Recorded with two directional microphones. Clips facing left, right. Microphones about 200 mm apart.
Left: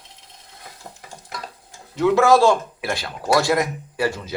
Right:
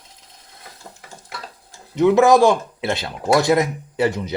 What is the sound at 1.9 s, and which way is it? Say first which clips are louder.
Speech: right 2 dB; 20° right (ahead or behind).